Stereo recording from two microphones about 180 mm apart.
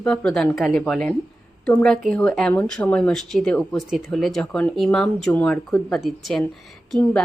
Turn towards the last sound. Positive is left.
turn(degrees=0)  # may be behind; listen again after turning